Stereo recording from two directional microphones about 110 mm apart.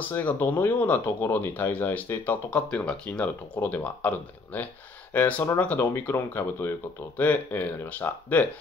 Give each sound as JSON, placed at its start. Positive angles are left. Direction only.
{"t": 0.1, "sound": "speech", "side_deg": 15}